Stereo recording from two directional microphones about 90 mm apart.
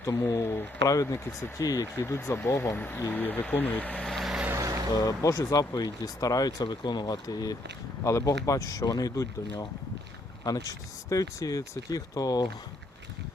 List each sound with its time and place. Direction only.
0.0 s speech: 30° left (ahead or behind)
4.0 s vehicle: centre (ahead or behind)
4.5 s vehicle: 35° right (ahead or behind)
4.9 s speech: 40° left (ahead or behind)